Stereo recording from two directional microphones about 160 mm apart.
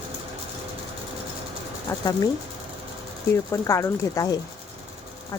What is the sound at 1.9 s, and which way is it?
Speech, 20° left (ahead or behind).